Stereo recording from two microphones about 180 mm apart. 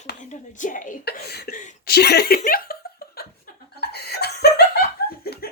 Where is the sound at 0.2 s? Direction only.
45° left (ahead or behind).